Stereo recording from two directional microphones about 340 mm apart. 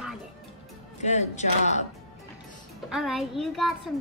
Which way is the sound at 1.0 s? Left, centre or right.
Centre.